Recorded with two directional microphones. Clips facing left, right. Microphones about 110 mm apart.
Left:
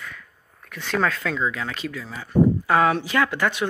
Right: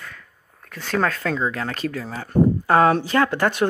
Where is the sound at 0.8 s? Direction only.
40° right (ahead or behind).